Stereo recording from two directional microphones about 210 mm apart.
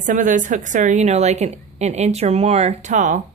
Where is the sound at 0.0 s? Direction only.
40° right (ahead or behind).